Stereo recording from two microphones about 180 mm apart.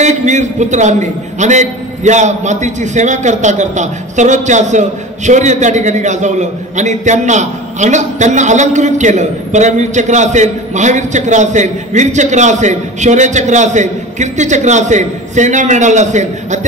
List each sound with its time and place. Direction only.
0.0 s a man's voice: 40° right (ahead or behind)